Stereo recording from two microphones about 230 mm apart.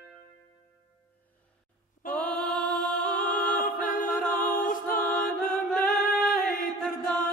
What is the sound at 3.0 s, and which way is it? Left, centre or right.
Music, left.